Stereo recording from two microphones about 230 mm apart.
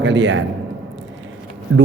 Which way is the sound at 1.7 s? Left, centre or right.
Right.